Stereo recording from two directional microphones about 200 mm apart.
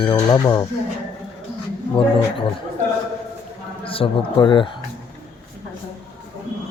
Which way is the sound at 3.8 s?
25° left (ahead or behind).